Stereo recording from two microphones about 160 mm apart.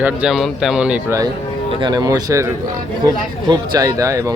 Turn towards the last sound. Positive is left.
turn(degrees=-20)  # may be behind; listen again after turning